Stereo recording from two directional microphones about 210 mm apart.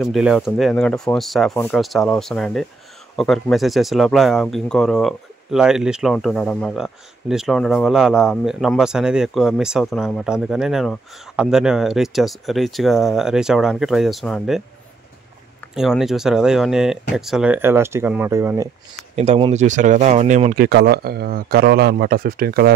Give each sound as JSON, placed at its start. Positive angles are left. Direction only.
{"t": 0.0, "sound": "speech", "side_deg": -5}
{"t": 15.7, "sound": "speech", "side_deg": 0}
{"t": 19.1, "sound": "speech", "side_deg": -30}